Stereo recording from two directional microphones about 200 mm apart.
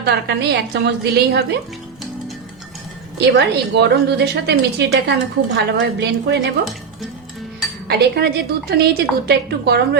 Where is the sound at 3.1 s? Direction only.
55° right (ahead or behind).